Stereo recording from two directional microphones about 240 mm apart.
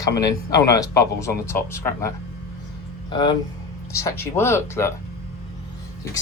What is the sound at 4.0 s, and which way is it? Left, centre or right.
Speech, centre.